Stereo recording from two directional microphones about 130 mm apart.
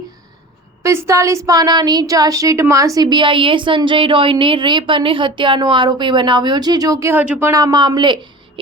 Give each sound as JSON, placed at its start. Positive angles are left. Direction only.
{"t": 0.8, "sound": "a woman's voice", "side_deg": -20}
{"t": 7.1, "sound": "a woman's voice", "side_deg": -15}